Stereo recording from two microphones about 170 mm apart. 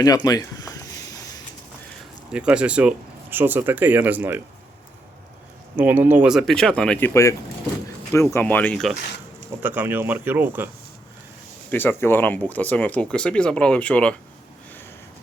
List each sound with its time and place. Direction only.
0.0 s speech: 20° left (ahead or behind)
2.3 s speech: 5° right (ahead or behind)
5.7 s speech: 10° right (ahead or behind)
9.6 s speech: 10° right (ahead or behind)
11.7 s speech: 10° left (ahead or behind)